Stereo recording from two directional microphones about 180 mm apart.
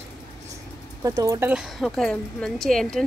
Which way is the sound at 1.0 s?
20° right (ahead or behind).